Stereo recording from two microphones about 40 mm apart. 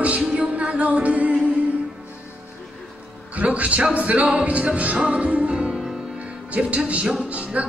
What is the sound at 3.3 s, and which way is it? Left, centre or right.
Music, right.